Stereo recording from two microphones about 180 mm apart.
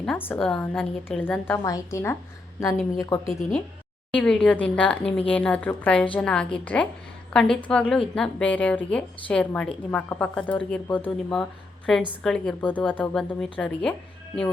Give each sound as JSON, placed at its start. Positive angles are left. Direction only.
{"t": 0.0, "sound": "a woman's voice", "side_deg": 10}
{"t": 4.1, "sound": "a woman's voice", "side_deg": 5}